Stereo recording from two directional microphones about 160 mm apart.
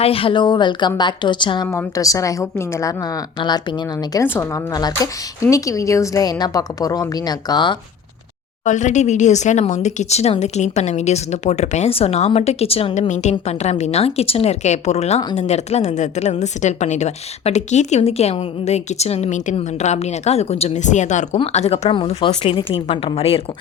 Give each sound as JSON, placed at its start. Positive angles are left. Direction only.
{"t": 0.0, "sound": "a woman's voice", "side_deg": 35}
{"t": 1.6, "sound": "a woman's voice", "side_deg": 20}
{"t": 8.6, "sound": "a woman's voice", "side_deg": 50}